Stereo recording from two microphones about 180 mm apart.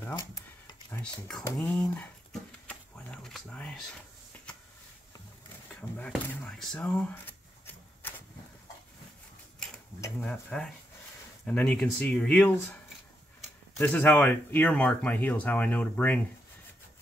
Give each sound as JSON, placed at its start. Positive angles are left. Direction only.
{"t": 0.7, "sound": "a sound", "side_deg": 20}
{"t": 1.2, "sound": "speech", "side_deg": 5}
{"t": 2.6, "sound": "a sound", "side_deg": 5}
{"t": 5.8, "sound": "speech", "side_deg": 10}
{"t": 9.9, "sound": "speech", "side_deg": 15}
{"t": 11.4, "sound": "speech", "side_deg": 5}
{"t": 13.7, "sound": "speech", "side_deg": 10}